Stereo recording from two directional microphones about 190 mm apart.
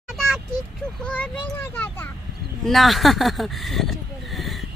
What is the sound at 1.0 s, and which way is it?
A child's voice, 5° left (ahead or behind).